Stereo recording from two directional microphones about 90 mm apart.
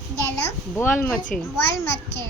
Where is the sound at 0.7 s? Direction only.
25° left (ahead or behind).